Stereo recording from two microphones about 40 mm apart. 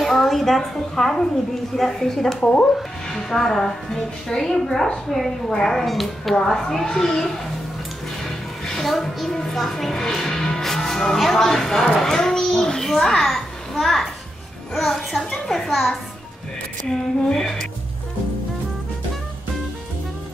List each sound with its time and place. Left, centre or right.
0.0 s a sound: centre
0.7 s a woman's voice: centre
2.4 s speech: left
2.7 s a woman's voice: centre
8.2 s music: centre
9.3 s a woman's voice: centre
9.6 s a woman's voice: centre
10.4 s music: centre
12.0 s a sound: centre
14.7 s a woman's voice: centre